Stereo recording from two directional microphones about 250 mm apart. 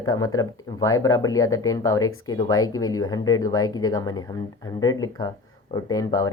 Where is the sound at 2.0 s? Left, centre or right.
Left.